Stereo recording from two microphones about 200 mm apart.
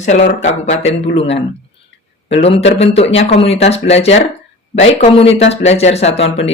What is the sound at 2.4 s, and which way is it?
Speech, 30° left (ahead or behind).